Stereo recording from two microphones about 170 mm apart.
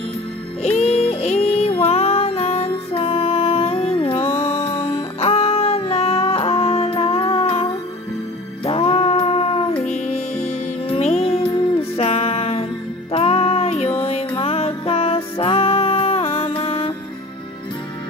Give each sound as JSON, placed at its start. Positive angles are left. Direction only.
{"t": 0.6, "sound": "music", "side_deg": 40}